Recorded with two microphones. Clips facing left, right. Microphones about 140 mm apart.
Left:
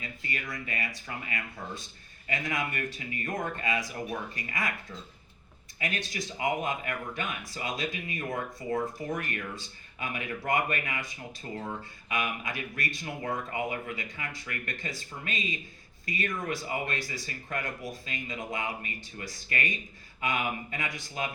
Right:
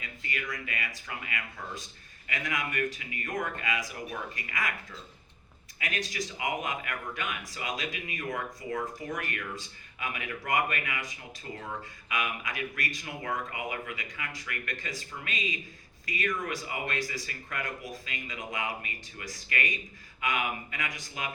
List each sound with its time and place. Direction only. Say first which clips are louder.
0.0 s speech: even; 35° left (ahead or behind)
5.8 s speech: even; 30° left (ahead or behind)
12.0 s speech: left 1 dB; 30° left (ahead or behind)